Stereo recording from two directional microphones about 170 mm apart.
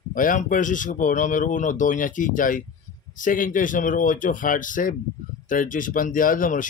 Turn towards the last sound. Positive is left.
turn(degrees=55)  # may be behind; listen again after turning